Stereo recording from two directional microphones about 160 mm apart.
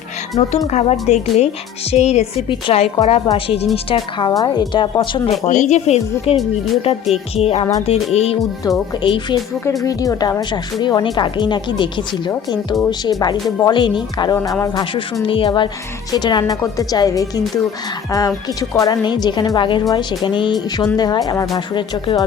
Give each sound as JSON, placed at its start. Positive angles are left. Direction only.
{"t": 0.4, "sound": "a woman's voice", "side_deg": 40}
{"t": 5.3, "sound": "speech", "side_deg": 50}
{"t": 7.3, "sound": "a woman's voice", "side_deg": 40}
{"t": 14.3, "sound": "speech", "side_deg": 20}
{"t": 15.2, "sound": "a woman's voice", "side_deg": 30}